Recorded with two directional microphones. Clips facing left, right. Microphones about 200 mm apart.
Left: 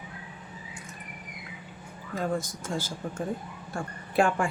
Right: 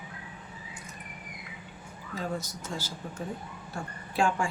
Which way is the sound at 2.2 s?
50° left (ahead or behind).